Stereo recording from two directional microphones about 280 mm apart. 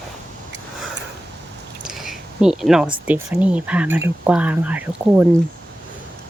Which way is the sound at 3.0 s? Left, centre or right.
Centre.